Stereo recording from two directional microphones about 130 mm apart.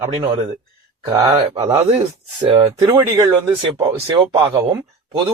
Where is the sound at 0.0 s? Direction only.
25° right (ahead or behind).